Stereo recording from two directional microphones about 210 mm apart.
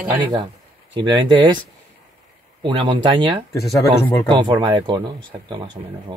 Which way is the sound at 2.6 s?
25° right (ahead or behind).